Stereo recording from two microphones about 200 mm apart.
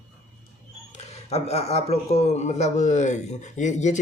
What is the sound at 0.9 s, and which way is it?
A man's voice, 30° left (ahead or behind).